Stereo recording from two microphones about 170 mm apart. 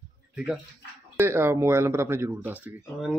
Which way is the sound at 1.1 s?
15° right (ahead or behind).